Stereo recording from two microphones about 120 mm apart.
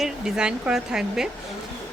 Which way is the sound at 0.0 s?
5° right (ahead or behind).